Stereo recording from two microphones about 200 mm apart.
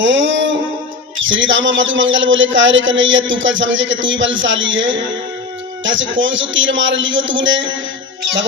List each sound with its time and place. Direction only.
0.0 s music: 65° right (ahead or behind)
1.3 s speech: 70° right (ahead or behind)